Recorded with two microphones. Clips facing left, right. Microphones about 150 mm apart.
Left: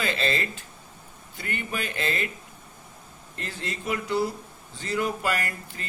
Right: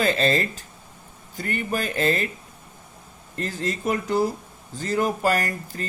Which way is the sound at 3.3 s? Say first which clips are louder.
Right 7 dB; 40° right (ahead or behind).